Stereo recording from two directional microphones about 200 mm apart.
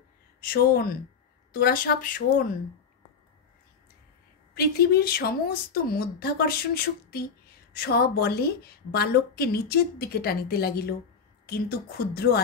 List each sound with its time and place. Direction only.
0.4 s a woman's voice: 50° left (ahead or behind)
4.6 s a woman's voice: 50° left (ahead or behind)
12.1 s a woman's voice: 50° left (ahead or behind)